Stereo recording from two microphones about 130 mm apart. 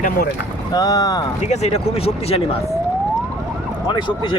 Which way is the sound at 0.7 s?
30° left (ahead or behind).